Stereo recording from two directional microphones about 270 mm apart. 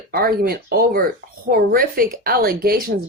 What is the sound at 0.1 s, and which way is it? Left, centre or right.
Speech, right.